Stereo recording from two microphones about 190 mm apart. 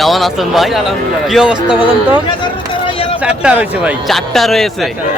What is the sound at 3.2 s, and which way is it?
Speech, 5° right (ahead or behind).